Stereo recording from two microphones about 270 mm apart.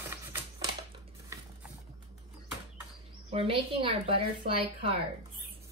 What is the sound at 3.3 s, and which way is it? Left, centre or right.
A woman's voice, right.